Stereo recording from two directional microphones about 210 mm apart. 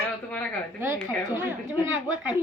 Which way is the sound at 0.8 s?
15° right (ahead or behind).